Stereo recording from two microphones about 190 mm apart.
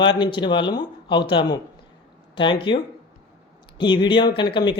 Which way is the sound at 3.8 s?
25° left (ahead or behind).